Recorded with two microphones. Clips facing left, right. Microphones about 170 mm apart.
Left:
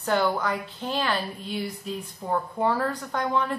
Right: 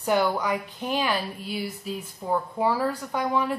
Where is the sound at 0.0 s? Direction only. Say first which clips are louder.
Right 1 dB; 10° right (ahead or behind).